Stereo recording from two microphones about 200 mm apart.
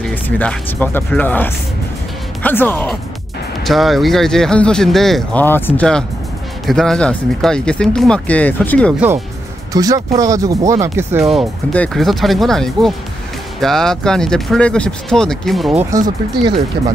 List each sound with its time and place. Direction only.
0.0 s speech: 5° left (ahead or behind)
9.7 s speech: 20° right (ahead or behind)
11.1 s speech: centre (ahead or behind)